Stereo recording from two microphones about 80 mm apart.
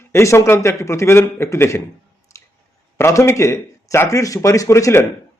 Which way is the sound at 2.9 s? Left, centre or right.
Left.